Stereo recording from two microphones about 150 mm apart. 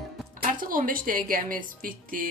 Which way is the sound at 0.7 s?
70° right (ahead or behind).